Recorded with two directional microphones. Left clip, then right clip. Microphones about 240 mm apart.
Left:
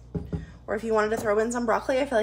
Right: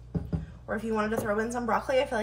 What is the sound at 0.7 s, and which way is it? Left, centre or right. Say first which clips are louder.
A woman's voice: left 5 dB; left.